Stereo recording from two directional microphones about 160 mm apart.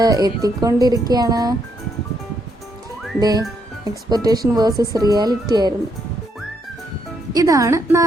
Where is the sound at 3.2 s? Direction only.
25° right (ahead or behind).